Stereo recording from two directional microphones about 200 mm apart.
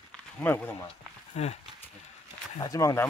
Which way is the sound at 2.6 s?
15° left (ahead or behind).